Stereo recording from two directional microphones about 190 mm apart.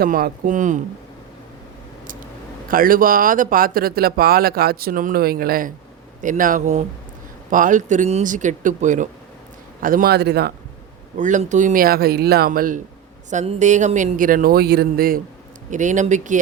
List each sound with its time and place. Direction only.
0.0 s speech: 50° right (ahead or behind)
2.6 s a man's voice: 45° right (ahead or behind)
11.2 s speech: 40° right (ahead or behind)
13.3 s speech: 35° right (ahead or behind); by 15.2 s 50° right (ahead or behind)
15.7 s speech: 40° right (ahead or behind)